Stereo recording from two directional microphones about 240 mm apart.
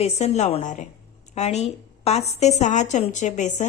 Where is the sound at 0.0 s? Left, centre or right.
Left.